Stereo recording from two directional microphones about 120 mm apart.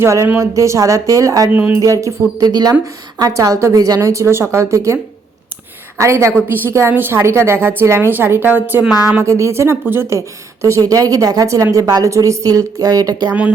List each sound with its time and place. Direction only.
0.0 s speech: 20° right (ahead or behind)
6.0 s a woman's voice: 25° right (ahead or behind); by 9.2 s 10° right (ahead or behind)
9.2 s speech: 25° right (ahead or behind)